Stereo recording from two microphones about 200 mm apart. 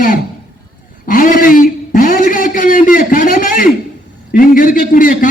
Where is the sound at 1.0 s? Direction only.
45° left (ahead or behind).